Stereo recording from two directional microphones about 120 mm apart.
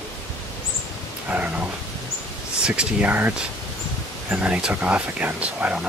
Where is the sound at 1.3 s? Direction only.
10° right (ahead or behind).